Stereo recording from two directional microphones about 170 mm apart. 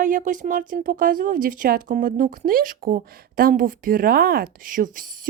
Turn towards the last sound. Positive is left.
turn(degrees=-50)  # may be behind; listen again after turning